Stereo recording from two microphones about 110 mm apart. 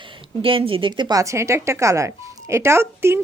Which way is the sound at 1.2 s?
25° right (ahead or behind).